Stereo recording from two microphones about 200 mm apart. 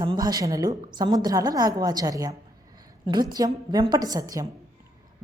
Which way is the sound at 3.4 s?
20° right (ahead or behind).